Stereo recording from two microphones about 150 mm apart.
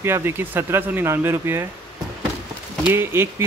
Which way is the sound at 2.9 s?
15° right (ahead or behind).